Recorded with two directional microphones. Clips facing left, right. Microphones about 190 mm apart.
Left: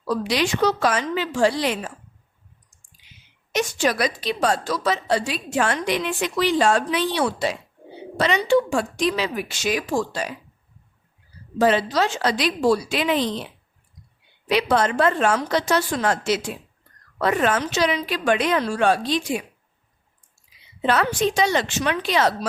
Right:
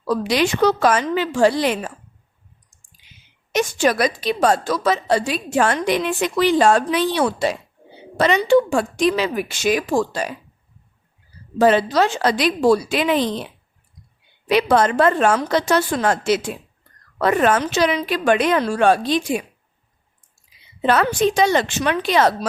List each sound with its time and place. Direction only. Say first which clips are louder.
0.1 s a woman's voice: right 3 dB; 55° right (ahead or behind)
3.5 s a woman's voice: right 4 dB; 50° right (ahead or behind)
11.6 s a woman's voice: right 4 dB; 50° right (ahead or behind)
14.4 s a woman's voice: right 4 dB; 50° right (ahead or behind)
20.8 s a woman's voice: right 3 dB; 50° right (ahead or behind)